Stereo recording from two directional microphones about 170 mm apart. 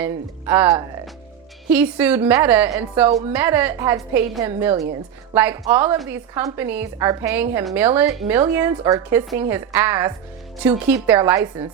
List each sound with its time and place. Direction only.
0.0 s a woman's voice: 10° right (ahead or behind)